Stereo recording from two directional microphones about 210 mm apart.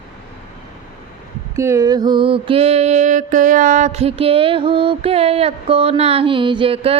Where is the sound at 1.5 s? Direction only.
15° right (ahead or behind).